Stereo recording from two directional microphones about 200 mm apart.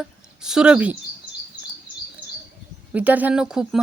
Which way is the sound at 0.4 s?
5° right (ahead or behind).